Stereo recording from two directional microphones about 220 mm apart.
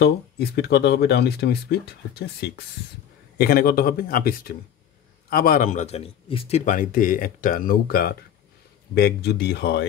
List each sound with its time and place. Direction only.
0.0 s speech: 50° left (ahead or behind)